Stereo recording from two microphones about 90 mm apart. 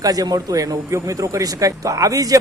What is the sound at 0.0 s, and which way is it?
A man's voice, 45° right (ahead or behind).